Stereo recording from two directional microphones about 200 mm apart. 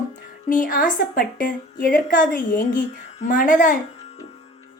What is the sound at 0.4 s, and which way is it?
A woman's voice, 40° left (ahead or behind).